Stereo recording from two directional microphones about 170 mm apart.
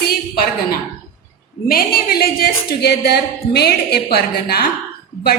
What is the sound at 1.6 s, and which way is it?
A woman's voice, 60° left (ahead or behind).